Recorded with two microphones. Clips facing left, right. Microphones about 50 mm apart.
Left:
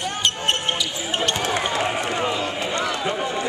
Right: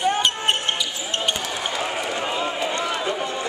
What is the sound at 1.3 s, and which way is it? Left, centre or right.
Basketball bounce, left.